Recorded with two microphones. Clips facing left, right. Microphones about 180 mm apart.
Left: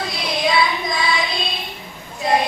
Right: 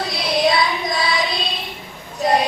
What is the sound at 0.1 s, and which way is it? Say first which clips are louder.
Child singing: right 3 dB; 40° right (ahead or behind).